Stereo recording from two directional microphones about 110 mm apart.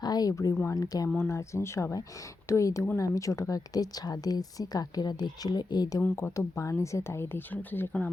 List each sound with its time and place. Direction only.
0.0 s a sound: 35° left (ahead or behind)
0.7 s speech: 35° left (ahead or behind)
6.0 s speech: 25° left (ahead or behind)